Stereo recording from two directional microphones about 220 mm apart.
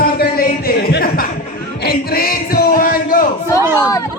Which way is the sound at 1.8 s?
45° left (ahead or behind).